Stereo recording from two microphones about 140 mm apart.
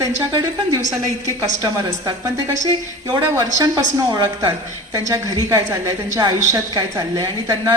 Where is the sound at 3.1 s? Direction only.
25° right (ahead or behind).